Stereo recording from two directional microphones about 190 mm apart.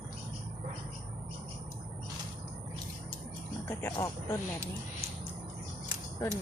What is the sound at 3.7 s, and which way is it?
Speech, 15° left (ahead or behind).